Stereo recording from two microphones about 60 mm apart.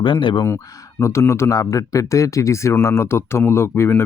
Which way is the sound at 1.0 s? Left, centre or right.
Left.